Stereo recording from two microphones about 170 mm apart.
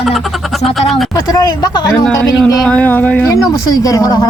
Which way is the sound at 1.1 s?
20° left (ahead or behind).